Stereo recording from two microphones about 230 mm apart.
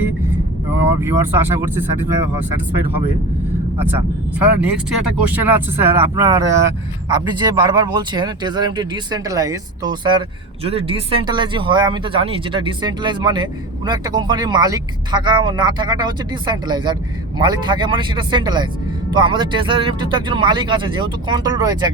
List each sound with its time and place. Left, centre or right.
0.9 s speech: centre
3.8 s speech: centre